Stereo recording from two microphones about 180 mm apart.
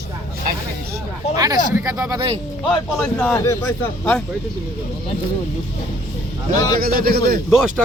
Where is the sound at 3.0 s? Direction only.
10° left (ahead or behind).